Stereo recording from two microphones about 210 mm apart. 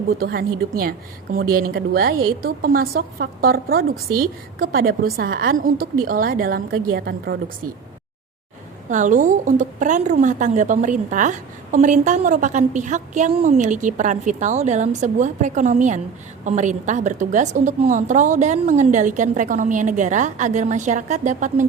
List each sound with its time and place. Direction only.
0.2 s a woman's voice: 45° right (ahead or behind)
8.9 s a woman's voice: 35° right (ahead or behind)